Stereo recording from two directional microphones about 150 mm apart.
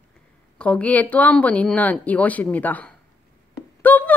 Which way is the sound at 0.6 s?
10° left (ahead or behind).